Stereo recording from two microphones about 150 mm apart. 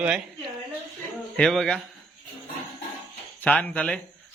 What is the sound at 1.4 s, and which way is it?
Speech, 5° left (ahead or behind).